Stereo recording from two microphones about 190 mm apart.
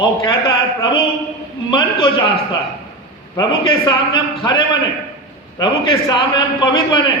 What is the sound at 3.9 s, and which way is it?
Speech, 25° left (ahead or behind).